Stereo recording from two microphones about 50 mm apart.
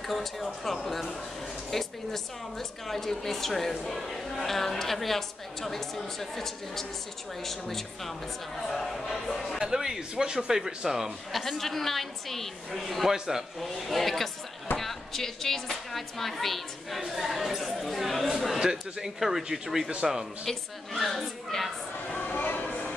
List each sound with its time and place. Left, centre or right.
0.0 s a woman's voice: centre
9.6 s speech: centre
11.4 s a woman's voice: centre
18.6 s a woman's voice: centre
22.2 s a sound: left